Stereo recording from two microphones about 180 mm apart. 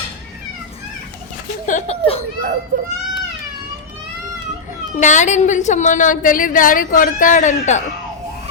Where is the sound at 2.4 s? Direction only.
60° right (ahead or behind).